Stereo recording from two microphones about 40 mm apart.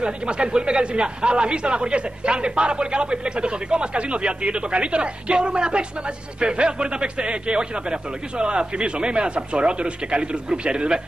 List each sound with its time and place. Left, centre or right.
0.0 s speech: right